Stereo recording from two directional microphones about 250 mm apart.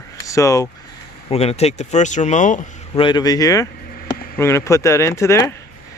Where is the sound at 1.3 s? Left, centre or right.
Left.